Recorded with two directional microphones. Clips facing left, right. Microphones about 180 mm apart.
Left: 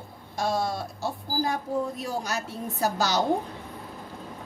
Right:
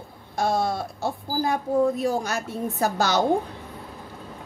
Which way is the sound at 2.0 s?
50° right (ahead or behind).